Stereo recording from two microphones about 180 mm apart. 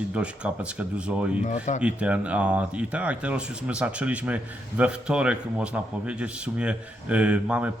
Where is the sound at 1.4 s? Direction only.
40° left (ahead or behind).